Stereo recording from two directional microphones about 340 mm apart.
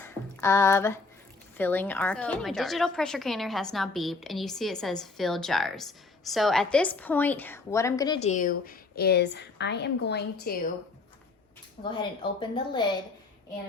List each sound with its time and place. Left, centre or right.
0.0 s a sound: centre
1.5 s a woman's voice: centre; by 10.6 s left
11.8 s a woman's voice: left